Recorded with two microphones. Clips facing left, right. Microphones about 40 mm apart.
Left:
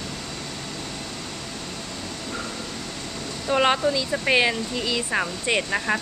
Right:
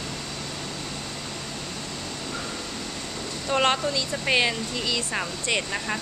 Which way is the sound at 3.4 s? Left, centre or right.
Centre.